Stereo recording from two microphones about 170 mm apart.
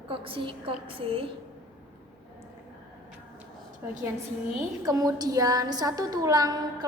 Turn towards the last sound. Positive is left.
turn(degrees=-20)  # may be behind; listen again after turning